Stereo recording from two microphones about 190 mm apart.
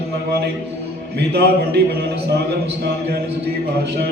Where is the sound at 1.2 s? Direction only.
60° right (ahead or behind).